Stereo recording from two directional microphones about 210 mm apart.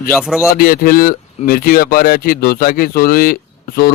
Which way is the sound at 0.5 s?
45° left (ahead or behind).